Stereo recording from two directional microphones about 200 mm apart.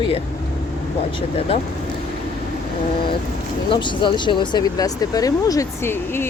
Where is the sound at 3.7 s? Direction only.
25° left (ahead or behind).